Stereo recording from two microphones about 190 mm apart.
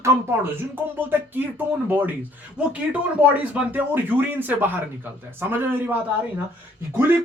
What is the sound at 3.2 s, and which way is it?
Speech, 10° right (ahead or behind).